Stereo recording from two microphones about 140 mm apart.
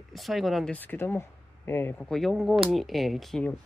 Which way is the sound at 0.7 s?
15° left (ahead or behind).